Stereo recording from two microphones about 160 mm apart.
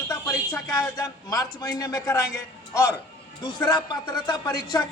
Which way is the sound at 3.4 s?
30° left (ahead or behind).